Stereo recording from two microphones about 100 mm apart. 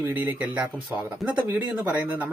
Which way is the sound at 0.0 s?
20° right (ahead or behind).